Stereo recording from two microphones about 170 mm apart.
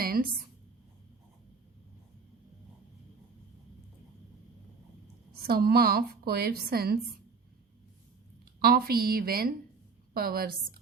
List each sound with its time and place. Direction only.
0.0 s a sound: 60° right (ahead or behind)
5.5 s a woman's voice: 65° right (ahead or behind)
8.6 s a woman's voice: 60° right (ahead or behind)